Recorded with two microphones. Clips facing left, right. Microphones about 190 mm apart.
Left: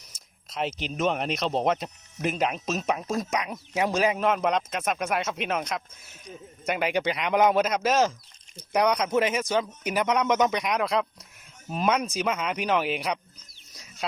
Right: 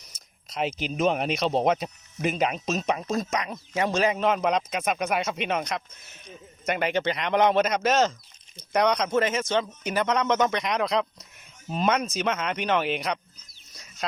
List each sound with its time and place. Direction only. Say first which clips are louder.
0.5 s speech: right 2 dB; centre (ahead or behind)